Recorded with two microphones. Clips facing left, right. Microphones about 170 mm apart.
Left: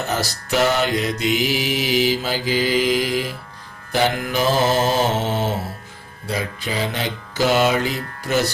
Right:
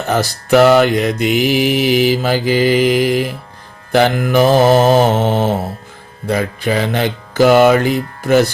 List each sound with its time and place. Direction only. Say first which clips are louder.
0.1 s mantra: right 14 dB; 60° right (ahead or behind)